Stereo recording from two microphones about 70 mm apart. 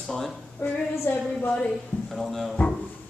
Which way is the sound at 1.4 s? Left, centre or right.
Centre.